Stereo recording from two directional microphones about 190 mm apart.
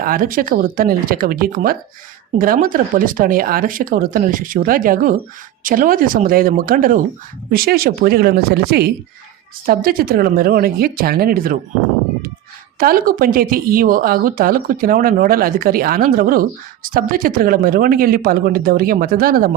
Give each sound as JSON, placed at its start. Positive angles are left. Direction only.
{"t": 0.0, "sound": "speech", "side_deg": -50}
{"t": 12.8, "sound": "speech", "side_deg": -50}